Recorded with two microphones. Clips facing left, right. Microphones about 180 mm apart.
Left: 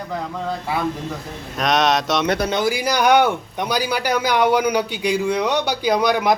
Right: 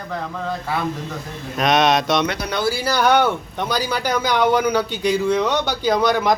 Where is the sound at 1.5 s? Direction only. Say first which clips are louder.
Right 2 dB; centre (ahead or behind).